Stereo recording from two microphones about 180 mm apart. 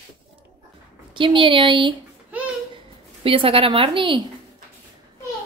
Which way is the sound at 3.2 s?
30° right (ahead or behind).